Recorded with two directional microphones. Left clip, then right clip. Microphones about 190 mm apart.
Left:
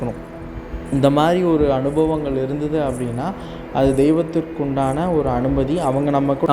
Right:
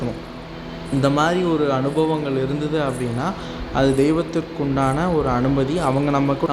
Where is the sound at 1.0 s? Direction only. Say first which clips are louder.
Left 3 dB; 20° left (ahead or behind); by 6.3 s 5° left (ahead or behind).